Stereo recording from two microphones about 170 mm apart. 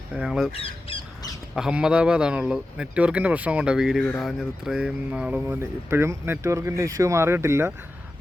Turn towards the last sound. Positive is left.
turn(degrees=-15)  # may be behind; listen again after turning